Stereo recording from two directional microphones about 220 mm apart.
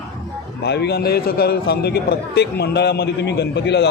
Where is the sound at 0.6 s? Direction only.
50° left (ahead or behind).